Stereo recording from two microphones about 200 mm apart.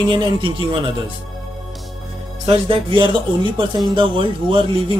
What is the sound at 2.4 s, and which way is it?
Speech, 25° right (ahead or behind).